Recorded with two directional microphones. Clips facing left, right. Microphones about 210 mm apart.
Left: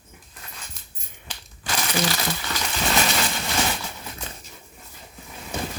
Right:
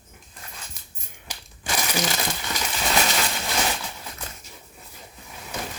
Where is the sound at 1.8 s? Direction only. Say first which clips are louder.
Left 2 dB; 10° right (ahead or behind).